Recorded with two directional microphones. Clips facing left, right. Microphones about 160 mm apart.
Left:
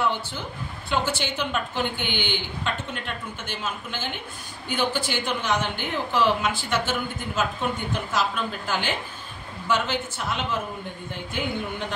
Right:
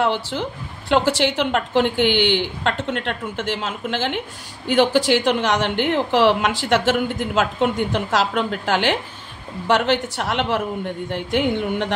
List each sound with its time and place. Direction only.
0.0 s a woman's voice: 85° right